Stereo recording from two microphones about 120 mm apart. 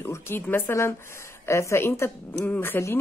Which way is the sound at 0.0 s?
20° left (ahead or behind).